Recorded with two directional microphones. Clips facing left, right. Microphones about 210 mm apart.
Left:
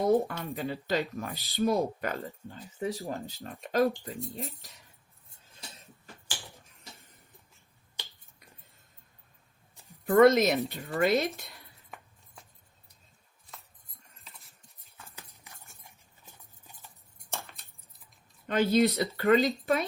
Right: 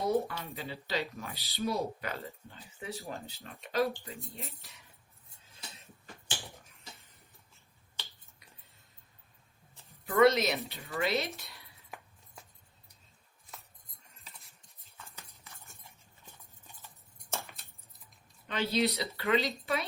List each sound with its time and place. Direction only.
0.0 s speech: 50° left (ahead or behind)
10.1 s speech: 50° left (ahead or behind)
18.4 s speech: 50° left (ahead or behind)